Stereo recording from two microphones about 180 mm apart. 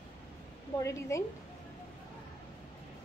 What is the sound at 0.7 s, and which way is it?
Speech, 15° left (ahead or behind).